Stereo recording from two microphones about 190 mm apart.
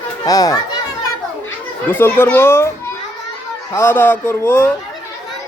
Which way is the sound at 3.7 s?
10° left (ahead or behind).